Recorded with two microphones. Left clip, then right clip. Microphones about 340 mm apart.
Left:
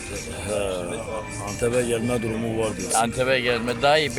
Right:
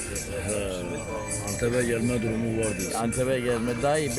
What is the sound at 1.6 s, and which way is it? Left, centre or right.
Speech, centre.